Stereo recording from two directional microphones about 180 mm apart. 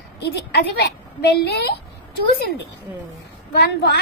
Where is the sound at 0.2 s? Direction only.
65° left (ahead or behind).